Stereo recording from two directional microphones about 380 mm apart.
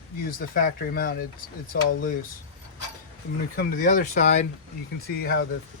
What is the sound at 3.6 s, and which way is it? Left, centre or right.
Speech, left.